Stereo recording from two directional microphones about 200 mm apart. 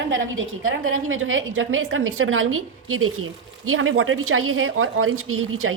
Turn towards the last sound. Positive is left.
turn(degrees=-90)